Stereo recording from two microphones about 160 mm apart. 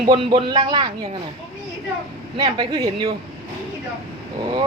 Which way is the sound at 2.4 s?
30° right (ahead or behind).